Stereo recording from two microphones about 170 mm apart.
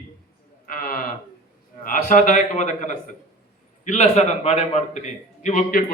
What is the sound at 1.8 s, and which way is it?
A man's voice, 50° left (ahead or behind).